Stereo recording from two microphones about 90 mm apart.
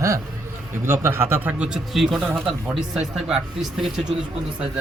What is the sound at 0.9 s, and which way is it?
Speech, 25° right (ahead or behind).